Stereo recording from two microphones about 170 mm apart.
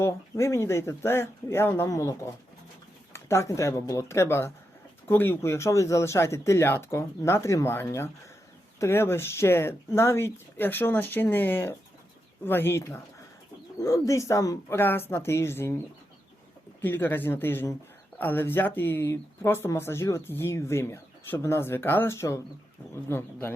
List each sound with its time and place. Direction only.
0.0 s speech: 15° left (ahead or behind)
16.8 s speech: 15° left (ahead or behind)